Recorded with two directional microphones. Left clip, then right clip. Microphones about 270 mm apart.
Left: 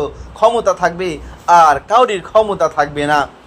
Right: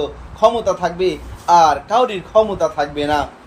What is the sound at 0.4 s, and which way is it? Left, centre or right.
A man's voice, centre.